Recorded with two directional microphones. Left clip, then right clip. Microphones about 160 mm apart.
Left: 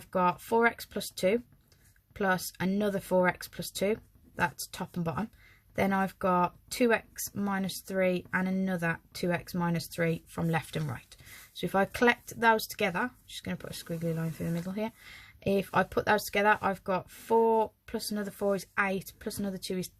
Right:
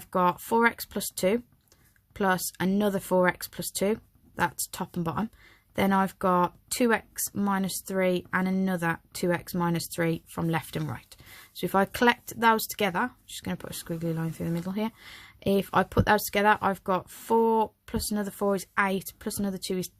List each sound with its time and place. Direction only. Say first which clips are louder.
0.1 s speech: right 3 dB; 40° right (ahead or behind)